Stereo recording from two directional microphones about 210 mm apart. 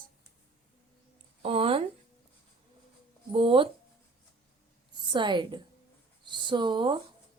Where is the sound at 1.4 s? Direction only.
25° right (ahead or behind).